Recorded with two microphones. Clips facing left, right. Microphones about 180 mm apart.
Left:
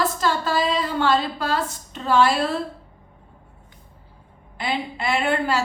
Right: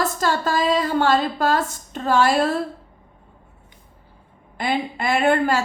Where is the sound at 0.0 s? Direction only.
45° right (ahead or behind).